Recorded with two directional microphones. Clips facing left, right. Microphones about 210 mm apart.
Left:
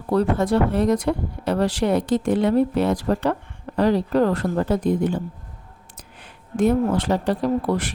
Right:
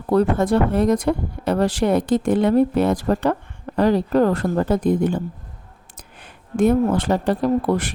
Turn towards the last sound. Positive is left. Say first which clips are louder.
# right 2 dB
turn(degrees=-50)  # may be behind; listen again after turning